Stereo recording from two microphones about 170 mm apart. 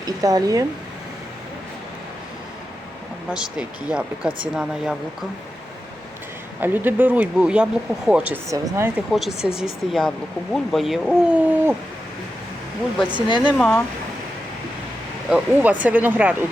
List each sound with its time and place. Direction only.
0.0 s speech: 20° right (ahead or behind)
3.2 s speech: 5° right (ahead or behind)
6.6 s speech: 10° right (ahead or behind)
8.4 s speech: 20° right (ahead or behind)
9.1 s speech: centre (ahead or behind)
13.2 s speech: 25° left (ahead or behind)
13.6 s speech: 10° left (ahead or behind)
15.3 s speech: 10° right (ahead or behind)